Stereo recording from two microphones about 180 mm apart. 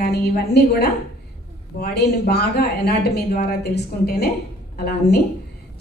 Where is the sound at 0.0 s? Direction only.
60° left (ahead or behind).